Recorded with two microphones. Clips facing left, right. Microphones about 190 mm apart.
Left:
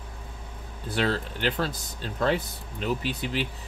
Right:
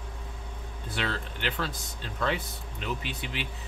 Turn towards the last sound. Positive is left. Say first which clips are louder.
# left 6 dB
turn(degrees=40)  # may be behind; listen again after turning